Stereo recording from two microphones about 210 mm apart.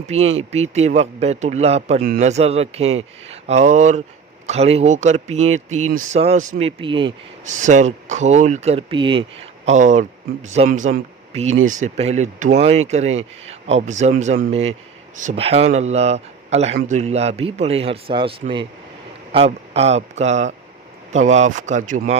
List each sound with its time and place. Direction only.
0.3 s speech: 30° right (ahead or behind)
7.4 s speech: 35° right (ahead or behind)